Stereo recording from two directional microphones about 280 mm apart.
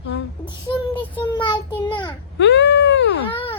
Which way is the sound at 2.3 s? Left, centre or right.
Left.